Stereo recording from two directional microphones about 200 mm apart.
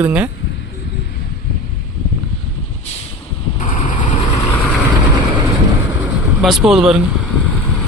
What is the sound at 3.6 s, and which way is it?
Vehicle, 40° left (ahead or behind).